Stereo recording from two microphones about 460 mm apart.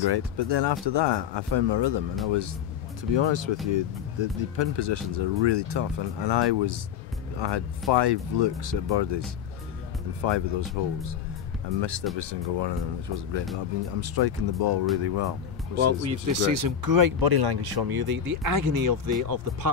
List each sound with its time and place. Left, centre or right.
0.0 s speech: right
10.2 s speech: right
15.8 s speech: right